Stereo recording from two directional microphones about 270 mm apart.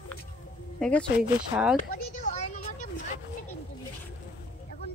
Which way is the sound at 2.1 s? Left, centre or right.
Left.